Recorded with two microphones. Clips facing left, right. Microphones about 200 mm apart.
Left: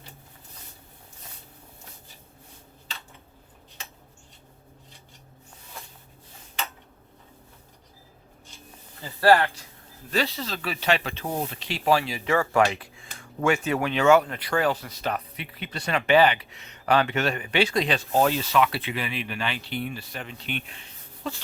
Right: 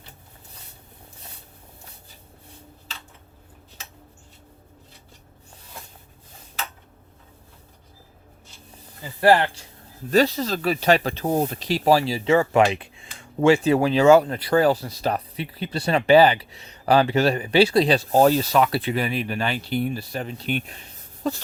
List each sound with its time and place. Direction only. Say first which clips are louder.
9.2 s speech: right 2 dB; 25° right (ahead or behind)
10.1 s speech: right 8 dB; 45° right (ahead or behind)